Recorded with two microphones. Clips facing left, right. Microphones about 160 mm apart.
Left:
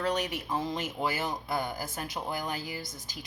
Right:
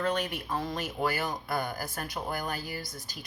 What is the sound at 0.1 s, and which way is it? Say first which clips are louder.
Speech: even; 20° left (ahead or behind).